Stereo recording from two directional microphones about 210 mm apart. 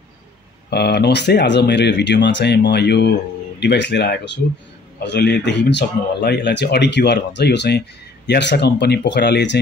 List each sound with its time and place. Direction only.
0.7 s speech: 50° left (ahead or behind)